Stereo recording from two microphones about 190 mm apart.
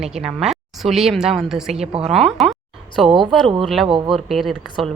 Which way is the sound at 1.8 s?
30° right (ahead or behind).